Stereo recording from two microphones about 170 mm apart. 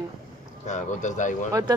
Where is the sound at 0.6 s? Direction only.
45° left (ahead or behind).